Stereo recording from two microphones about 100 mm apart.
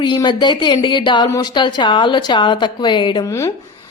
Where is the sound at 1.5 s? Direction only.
50° left (ahead or behind).